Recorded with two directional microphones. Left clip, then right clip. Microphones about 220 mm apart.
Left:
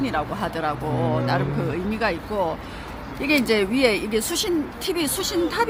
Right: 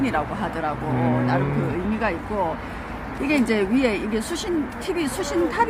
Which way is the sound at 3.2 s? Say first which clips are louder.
Left 2 dB; 25° left (ahead or behind).